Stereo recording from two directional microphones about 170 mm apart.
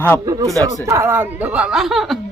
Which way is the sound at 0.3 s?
20° right (ahead or behind).